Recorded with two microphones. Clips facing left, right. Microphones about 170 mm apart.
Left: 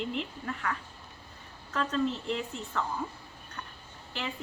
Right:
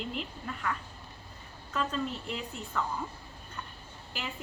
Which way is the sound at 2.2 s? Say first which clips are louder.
Left 4 dB; 5° right (ahead or behind).